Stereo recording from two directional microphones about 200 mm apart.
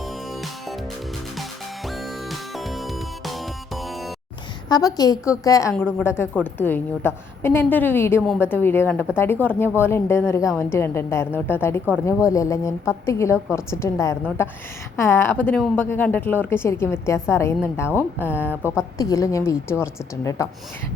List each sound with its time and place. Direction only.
1.9 s music: centre (ahead or behind)
4.7 s a woman's voice: 20° left (ahead or behind)